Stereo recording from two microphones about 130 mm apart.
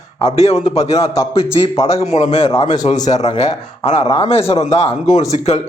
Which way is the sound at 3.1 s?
60° left (ahead or behind).